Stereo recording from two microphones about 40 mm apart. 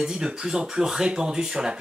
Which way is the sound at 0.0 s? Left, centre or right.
Centre.